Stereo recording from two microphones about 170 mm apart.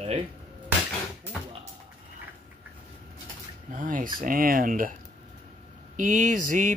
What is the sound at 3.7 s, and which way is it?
Speech, 50° right (ahead or behind).